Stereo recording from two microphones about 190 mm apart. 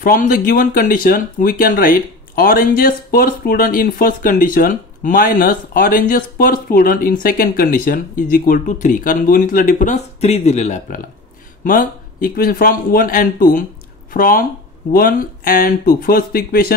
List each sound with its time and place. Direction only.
0.0 s speech: 50° left (ahead or behind)